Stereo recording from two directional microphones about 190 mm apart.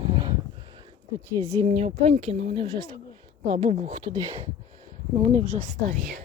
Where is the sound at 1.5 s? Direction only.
30° right (ahead or behind).